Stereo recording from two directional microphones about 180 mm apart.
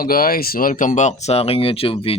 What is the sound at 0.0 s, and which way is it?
Speech, 55° left (ahead or behind).